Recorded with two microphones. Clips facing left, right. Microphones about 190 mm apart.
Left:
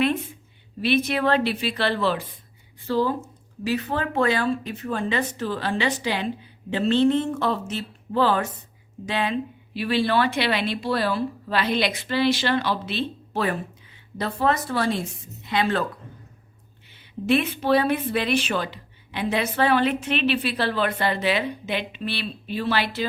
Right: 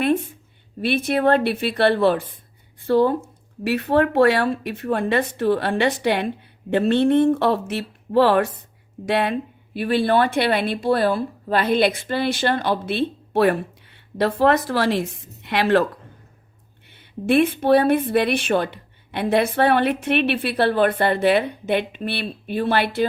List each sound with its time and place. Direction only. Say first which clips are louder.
0.9 s a woman's voice: right 3 dB; 50° right (ahead or behind); by 15.8 s 65° right (ahead or behind)
17.0 s a woman's voice: right 4 dB; 55° right (ahead or behind)